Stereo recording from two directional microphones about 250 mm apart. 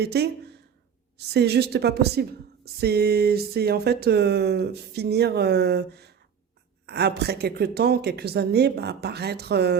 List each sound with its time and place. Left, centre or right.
0.0 s speech: right
1.3 s speech: right